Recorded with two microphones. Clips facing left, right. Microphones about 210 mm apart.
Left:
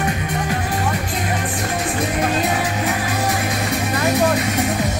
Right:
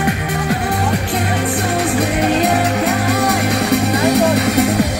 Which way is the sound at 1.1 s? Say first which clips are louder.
Right 5 dB; 65° right (ahead or behind).